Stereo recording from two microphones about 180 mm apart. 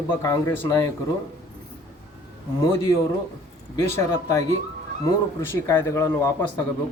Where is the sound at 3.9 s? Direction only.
15° left (ahead or behind).